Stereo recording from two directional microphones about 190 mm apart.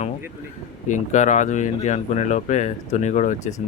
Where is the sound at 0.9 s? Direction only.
40° left (ahead or behind).